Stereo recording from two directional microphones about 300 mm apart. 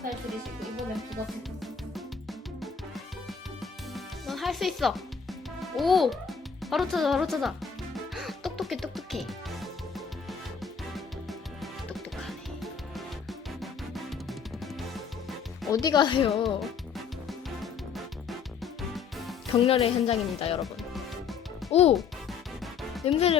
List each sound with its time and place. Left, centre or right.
0.6 s speech: centre
2.6 s music: centre
5.7 s a child's voice: centre
8.1 s music: centre
15.7 s speech: centre
17.2 s music: centre
19.5 s speech: centre
20.6 s music: centre
21.7 s a child's voice: left
21.9 s music: centre
23.0 s speech: centre